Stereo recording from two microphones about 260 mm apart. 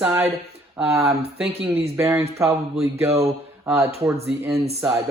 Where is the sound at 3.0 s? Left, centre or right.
Right.